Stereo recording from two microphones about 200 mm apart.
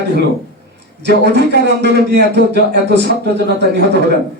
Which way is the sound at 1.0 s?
60° right (ahead or behind).